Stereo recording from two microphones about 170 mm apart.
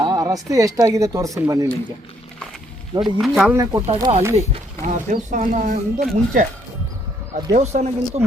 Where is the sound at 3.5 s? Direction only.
20° right (ahead or behind).